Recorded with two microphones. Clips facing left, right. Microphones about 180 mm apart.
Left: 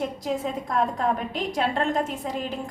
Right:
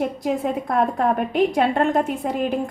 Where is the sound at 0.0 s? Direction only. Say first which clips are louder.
Right 5 dB; 60° right (ahead or behind).